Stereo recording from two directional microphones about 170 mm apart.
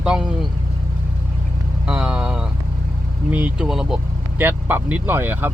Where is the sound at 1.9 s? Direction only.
5° right (ahead or behind).